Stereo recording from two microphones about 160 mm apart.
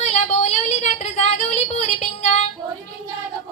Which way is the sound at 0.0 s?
45° left (ahead or behind).